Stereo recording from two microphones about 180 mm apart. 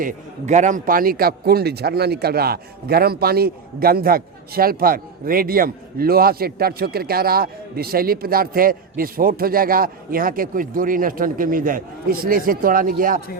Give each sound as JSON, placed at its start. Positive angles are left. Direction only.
{"t": 0.0, "sound": "a man's voice", "side_deg": -40}